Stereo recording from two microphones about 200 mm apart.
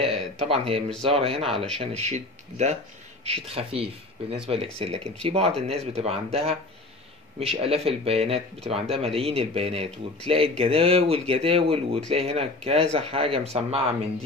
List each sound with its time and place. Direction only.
0.0 s speech: 30° right (ahead or behind)